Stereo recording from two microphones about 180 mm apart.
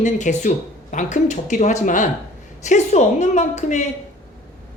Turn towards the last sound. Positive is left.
turn(degrees=40)  # may be behind; listen again after turning